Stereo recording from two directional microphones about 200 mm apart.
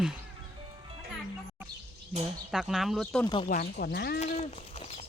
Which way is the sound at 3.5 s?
45° left (ahead or behind).